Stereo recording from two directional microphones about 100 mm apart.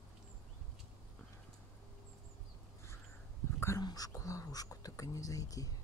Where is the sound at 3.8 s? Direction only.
40° left (ahead or behind).